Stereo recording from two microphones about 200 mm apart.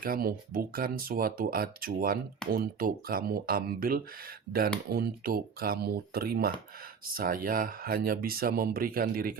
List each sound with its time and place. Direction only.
0.0 s speech: 45° right (ahead or behind)